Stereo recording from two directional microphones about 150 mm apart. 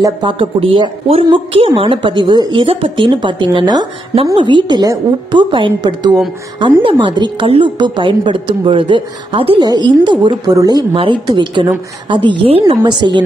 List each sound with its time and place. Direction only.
0.0 s a woman's voice: 35° right (ahead or behind)